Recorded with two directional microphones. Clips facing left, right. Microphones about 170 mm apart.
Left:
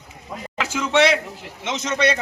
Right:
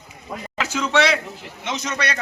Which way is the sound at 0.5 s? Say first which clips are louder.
Left 1 dB; 10° left (ahead or behind).